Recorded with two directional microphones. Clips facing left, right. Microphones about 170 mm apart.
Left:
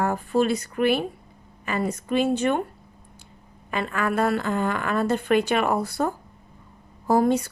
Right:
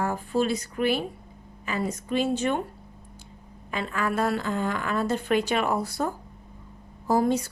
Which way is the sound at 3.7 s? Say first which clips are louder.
Left 3 dB; 60° left (ahead or behind).